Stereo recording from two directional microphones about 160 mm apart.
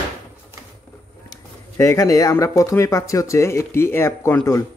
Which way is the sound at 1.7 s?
20° left (ahead or behind).